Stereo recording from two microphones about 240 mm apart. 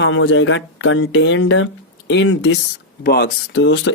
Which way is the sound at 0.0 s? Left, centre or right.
Left.